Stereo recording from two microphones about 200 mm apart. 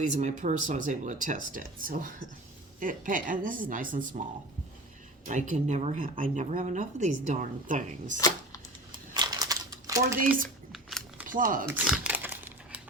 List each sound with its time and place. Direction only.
0.2 s speech: 35° right (ahead or behind)
5.2 s speech: 40° right (ahead or behind)
9.1 s typing: 20° right (ahead or behind)
10.7 s a sound: centre (ahead or behind)
11.3 s speech: 45° right (ahead or behind)
11.7 s crumpling: 5° right (ahead or behind)